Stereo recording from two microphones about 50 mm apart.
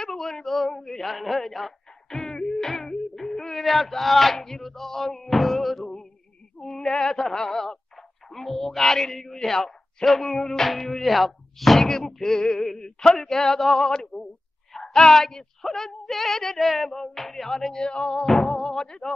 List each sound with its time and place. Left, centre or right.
0.0 s speech: centre
6.6 s a sound: centre
8.3 s speech: centre